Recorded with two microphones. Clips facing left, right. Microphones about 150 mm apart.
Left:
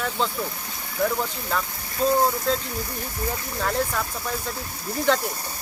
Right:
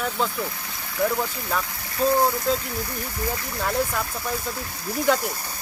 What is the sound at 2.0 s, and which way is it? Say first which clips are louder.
Speech: even; 10° right (ahead or behind).